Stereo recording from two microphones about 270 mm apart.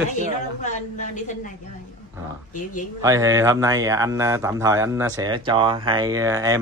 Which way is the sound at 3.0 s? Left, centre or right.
Centre.